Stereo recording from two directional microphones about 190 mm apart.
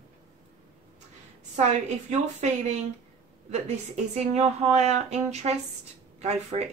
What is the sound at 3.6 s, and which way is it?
A woman's voice, 35° right (ahead or behind).